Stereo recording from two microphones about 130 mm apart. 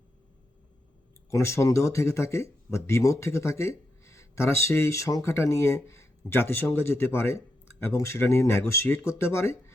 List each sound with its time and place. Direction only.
1.3 s speech: 20° left (ahead or behind)